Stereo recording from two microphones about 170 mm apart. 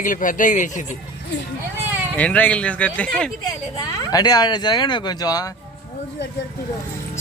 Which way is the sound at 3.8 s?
25° left (ahead or behind).